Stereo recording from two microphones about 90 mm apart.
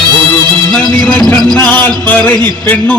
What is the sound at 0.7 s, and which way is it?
Music, 10° left (ahead or behind).